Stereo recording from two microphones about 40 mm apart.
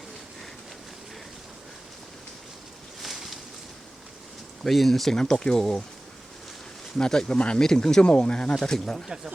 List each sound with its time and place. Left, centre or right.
3.0 s a sound: centre
4.6 s speech: centre
5.2 s speech: centre
7.0 s speech: centre
7.6 s speech: centre